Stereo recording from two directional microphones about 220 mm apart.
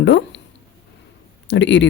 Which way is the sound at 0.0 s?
55° left (ahead or behind).